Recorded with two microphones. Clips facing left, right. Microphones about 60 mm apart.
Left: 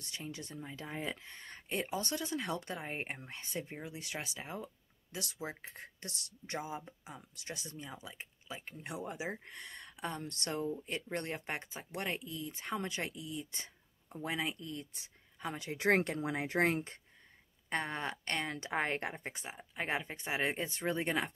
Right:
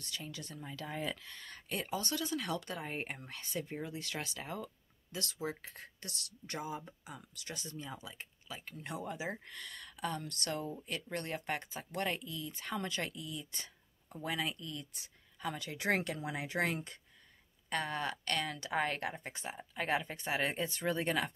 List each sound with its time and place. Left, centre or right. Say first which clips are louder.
0.0 s speech: left 1 dB; left
19.5 s speech: right 2 dB; centre